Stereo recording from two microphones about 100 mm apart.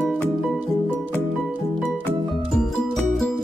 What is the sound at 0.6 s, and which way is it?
Music, 20° right (ahead or behind).